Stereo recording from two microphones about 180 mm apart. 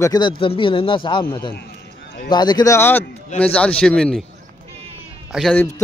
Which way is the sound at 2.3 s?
25° left (ahead or behind).